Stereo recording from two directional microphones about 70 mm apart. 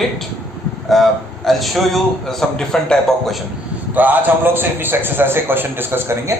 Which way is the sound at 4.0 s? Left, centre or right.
Right.